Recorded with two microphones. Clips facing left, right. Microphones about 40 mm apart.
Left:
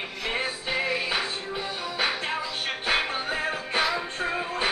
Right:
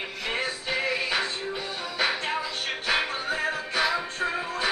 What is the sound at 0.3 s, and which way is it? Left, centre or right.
Music, centre.